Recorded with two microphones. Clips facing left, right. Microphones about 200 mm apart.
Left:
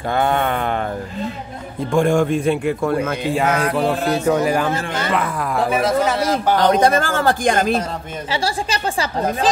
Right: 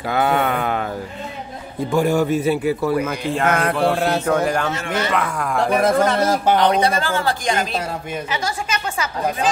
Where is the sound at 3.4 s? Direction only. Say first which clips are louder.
Right 2 dB; 55° right (ahead or behind).